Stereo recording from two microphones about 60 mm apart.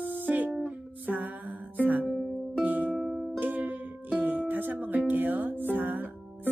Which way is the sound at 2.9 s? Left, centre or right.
Centre.